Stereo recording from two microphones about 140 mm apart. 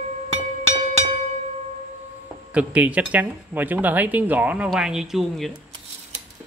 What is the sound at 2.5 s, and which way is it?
Speech, 10° right (ahead or behind).